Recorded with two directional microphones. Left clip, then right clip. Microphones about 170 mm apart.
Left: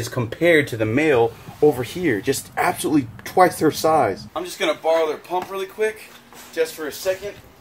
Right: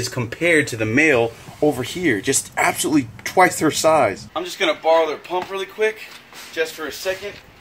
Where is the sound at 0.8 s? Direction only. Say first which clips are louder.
Right 1 dB; 5° right (ahead or behind).